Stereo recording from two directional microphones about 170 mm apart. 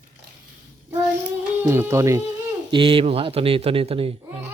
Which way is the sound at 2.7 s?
30° right (ahead or behind).